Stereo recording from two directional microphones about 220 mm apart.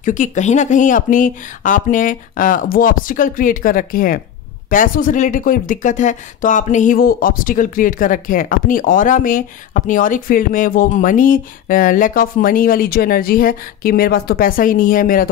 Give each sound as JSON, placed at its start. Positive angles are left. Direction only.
{"t": 0.0, "sound": "speech", "side_deg": 35}